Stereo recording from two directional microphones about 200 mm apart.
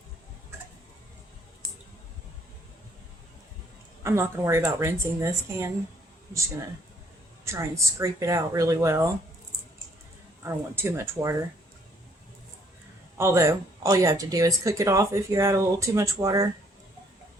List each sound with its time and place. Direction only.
4.0 s speech: 15° right (ahead or behind)
7.4 s speech: 15° right (ahead or behind)
10.4 s speech: 10° right (ahead or behind)
13.1 s speech: 15° right (ahead or behind)